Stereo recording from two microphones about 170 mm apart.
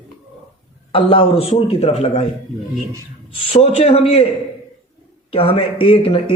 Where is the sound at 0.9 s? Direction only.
30° left (ahead or behind).